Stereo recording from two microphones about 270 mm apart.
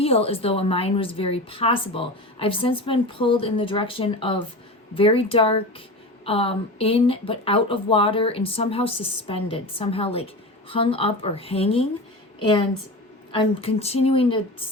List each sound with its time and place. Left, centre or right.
0.0 s a woman's voice: left